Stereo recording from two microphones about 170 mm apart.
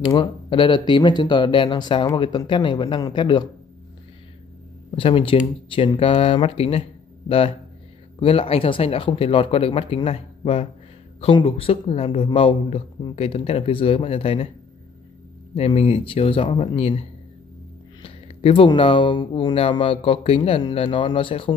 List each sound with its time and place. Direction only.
0.1 s speech: 30° left (ahead or behind)
4.9 s speech: 30° left (ahead or behind)
15.5 s speech: 35° left (ahead or behind)